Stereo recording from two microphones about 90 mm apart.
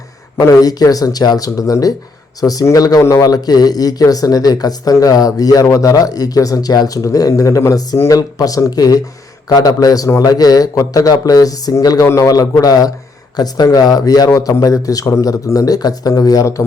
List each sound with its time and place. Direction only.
0.3 s a man's voice: 40° left (ahead or behind)